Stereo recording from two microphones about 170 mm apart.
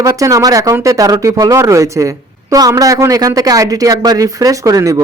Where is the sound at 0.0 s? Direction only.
20° right (ahead or behind).